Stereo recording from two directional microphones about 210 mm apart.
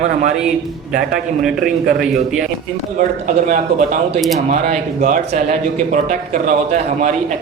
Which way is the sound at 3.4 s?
35° right (ahead or behind).